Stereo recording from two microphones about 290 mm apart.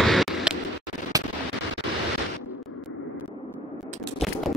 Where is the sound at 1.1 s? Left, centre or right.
Centre.